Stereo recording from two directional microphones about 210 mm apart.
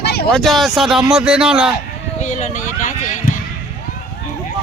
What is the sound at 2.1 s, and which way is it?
Speech, 35° left (ahead or behind).